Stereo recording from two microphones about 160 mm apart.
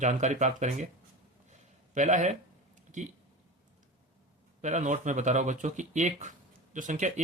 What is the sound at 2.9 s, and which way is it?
Speech, 50° right (ahead or behind).